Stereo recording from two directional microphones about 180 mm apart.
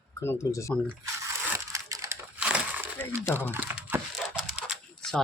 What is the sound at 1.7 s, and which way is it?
Typing, 15° right (ahead or behind).